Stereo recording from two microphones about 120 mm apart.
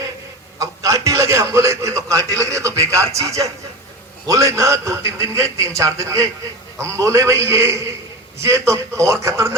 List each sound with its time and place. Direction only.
0.6 s a man's voice: 25° right (ahead or behind)